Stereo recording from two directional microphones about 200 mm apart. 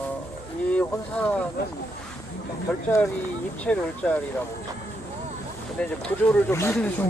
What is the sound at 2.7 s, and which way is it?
Speech, 5° left (ahead or behind).